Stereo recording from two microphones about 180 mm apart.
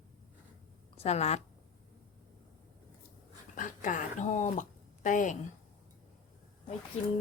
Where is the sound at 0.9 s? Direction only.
35° left (ahead or behind).